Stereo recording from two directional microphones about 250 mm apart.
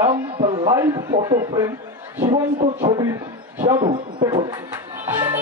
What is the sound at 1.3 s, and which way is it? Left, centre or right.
Speech, centre.